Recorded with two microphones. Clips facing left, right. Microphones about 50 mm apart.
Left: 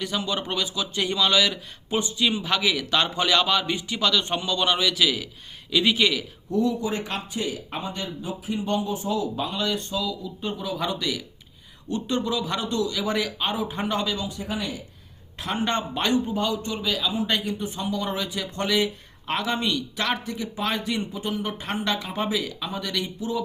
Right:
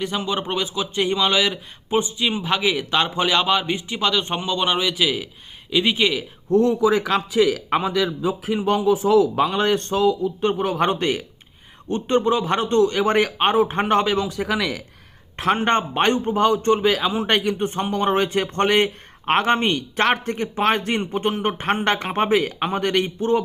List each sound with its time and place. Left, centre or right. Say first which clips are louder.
0.0 s speech: right 4 dB; right
6.5 s speech: right 6 dB; right
6.8 s a man's voice: right 10 dB; right
15.4 s a man's voice: right 7 dB; right